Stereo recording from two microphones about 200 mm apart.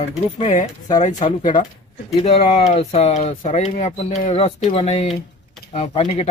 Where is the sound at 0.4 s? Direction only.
40° left (ahead or behind).